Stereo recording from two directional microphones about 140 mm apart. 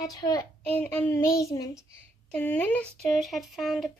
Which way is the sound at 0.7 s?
10° left (ahead or behind).